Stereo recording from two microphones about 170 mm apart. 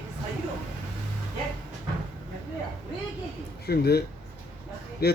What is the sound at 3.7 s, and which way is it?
Speech, 65° left (ahead or behind).